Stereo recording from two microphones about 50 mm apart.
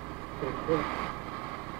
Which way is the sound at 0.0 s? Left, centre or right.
Centre.